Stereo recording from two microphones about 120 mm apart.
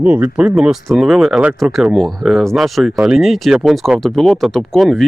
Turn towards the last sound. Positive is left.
turn(degrees=0)  # may be behind; listen again after turning